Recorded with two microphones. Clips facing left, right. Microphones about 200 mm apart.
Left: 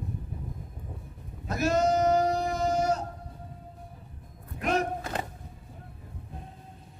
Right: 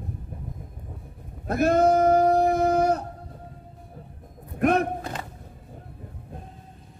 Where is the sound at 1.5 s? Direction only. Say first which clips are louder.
Right 6 dB; 55° right (ahead or behind).